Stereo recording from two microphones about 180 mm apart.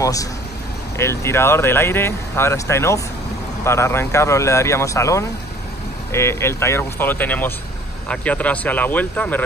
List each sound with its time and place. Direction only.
0.0 s speech: 20° left (ahead or behind)